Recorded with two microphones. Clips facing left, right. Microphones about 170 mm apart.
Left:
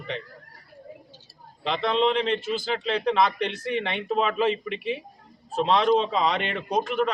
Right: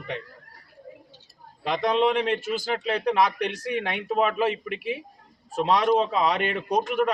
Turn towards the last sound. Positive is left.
turn(degrees=-10)  # may be behind; listen again after turning